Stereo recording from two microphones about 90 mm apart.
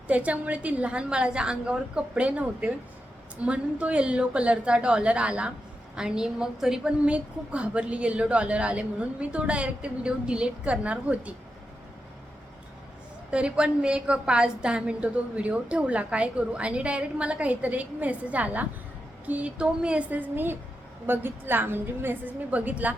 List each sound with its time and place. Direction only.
0.1 s a woman's voice: 15° right (ahead or behind)
13.3 s a woman's voice: 10° right (ahead or behind)